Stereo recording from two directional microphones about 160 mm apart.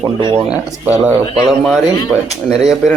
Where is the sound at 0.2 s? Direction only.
30° right (ahead or behind).